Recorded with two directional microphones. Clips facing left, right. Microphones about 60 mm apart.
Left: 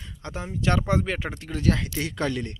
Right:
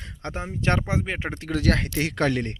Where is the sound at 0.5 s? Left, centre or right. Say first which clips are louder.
Even; right.